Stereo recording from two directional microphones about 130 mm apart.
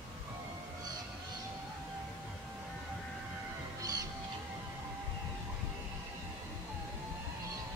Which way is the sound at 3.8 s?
30° right (ahead or behind).